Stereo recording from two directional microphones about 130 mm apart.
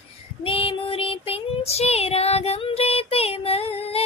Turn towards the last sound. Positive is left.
turn(degrees=50)  # may be behind; listen again after turning